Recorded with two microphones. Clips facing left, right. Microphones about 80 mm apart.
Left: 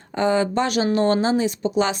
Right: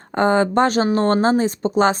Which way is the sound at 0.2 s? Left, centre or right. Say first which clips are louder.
Right 4 dB; right.